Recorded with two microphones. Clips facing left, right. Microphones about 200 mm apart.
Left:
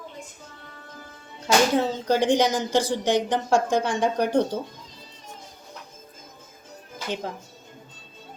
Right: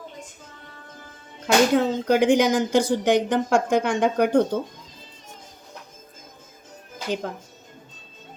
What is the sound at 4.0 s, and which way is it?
Speech, 55° right (ahead or behind).